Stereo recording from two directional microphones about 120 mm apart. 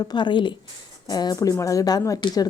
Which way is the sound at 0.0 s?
35° left (ahead or behind).